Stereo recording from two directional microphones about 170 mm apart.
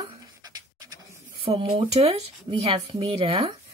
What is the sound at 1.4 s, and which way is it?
A woman's voice, 35° right (ahead or behind).